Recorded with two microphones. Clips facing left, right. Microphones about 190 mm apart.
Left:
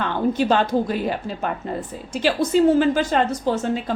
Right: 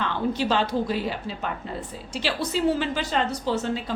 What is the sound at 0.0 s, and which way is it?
A woman's voice, 50° left (ahead or behind).